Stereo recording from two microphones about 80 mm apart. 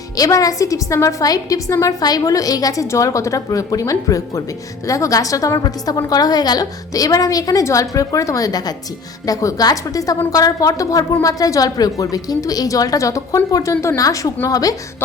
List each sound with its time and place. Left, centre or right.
0.2 s a woman's voice: left